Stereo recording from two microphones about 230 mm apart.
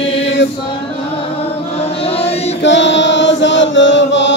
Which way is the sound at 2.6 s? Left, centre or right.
Left.